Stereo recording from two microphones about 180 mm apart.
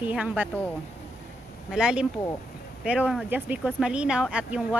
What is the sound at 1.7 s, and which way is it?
A woman's voice, 5° right (ahead or behind).